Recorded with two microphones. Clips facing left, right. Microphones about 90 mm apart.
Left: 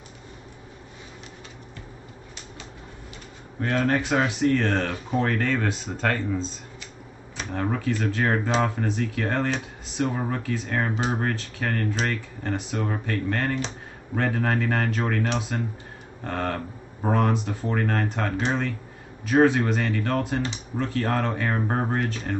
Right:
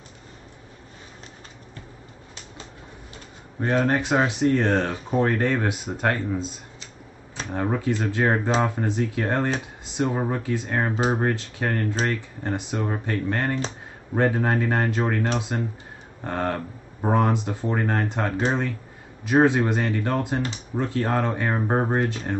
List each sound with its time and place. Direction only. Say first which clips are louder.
3.6 s speech: right 2 dB; 15° right (ahead or behind)
7.5 s speech: right 2 dB; 20° right (ahead or behind)